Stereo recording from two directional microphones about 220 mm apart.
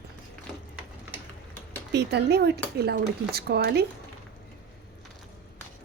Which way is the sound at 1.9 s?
50° right (ahead or behind).